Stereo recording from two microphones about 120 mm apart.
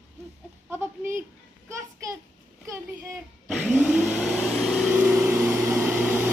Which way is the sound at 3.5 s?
Centre (ahead or behind).